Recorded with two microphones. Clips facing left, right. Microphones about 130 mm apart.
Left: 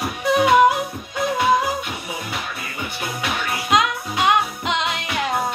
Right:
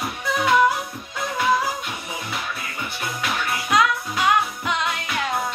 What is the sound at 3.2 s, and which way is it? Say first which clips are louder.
Music: even; 20° left (ahead or behind).